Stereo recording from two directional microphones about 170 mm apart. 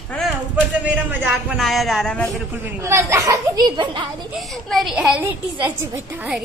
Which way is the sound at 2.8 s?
15° right (ahead or behind).